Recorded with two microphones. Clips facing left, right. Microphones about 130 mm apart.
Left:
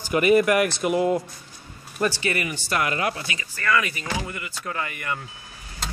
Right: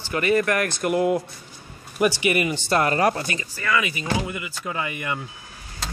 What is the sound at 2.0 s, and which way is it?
Speech, 15° right (ahead or behind).